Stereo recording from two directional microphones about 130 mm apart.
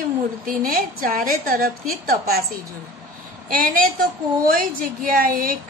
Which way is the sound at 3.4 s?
90° right.